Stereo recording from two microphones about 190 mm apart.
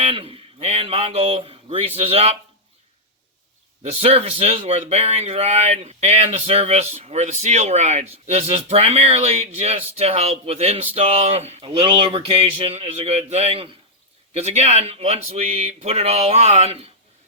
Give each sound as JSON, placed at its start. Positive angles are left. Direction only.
{"t": 0.0, "sound": "speech", "side_deg": -30}
{"t": 3.8, "sound": "speech", "side_deg": -30}